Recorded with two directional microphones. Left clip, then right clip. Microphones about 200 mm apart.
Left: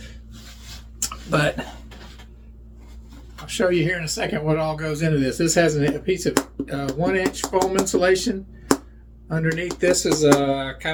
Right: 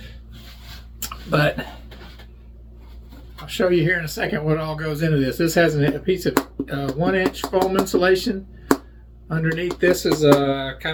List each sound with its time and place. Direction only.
0.9 s a sound: 10° right (ahead or behind)
3.4 s speech: 10° right (ahead or behind)
7.6 s speech: 5° right (ahead or behind)
7.9 s speech: 15° right (ahead or behind)